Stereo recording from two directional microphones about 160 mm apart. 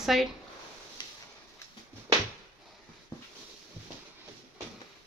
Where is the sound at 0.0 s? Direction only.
Centre (ahead or behind).